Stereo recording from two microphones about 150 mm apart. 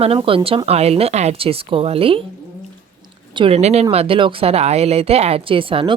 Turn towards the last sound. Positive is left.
turn(degrees=-35)  # may be behind; listen again after turning